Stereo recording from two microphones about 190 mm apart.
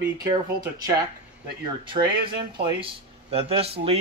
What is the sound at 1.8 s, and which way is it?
Speech, 25° right (ahead or behind).